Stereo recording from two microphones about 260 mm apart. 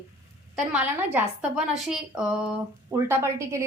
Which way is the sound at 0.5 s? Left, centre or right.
Centre.